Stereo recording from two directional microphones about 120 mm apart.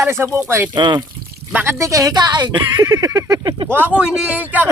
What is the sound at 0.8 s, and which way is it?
Speech, 40° right (ahead or behind).